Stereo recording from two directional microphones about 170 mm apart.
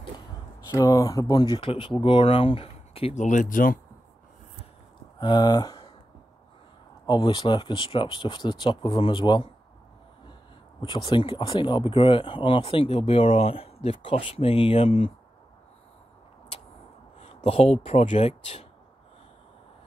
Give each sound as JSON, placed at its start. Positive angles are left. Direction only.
{"t": 0.7, "sound": "speech", "side_deg": 20}
{"t": 5.2, "sound": "speech", "side_deg": 25}
{"t": 7.1, "sound": "speech", "side_deg": 25}
{"t": 10.8, "sound": "speech", "side_deg": 30}
{"t": 17.2, "sound": "speech", "side_deg": 35}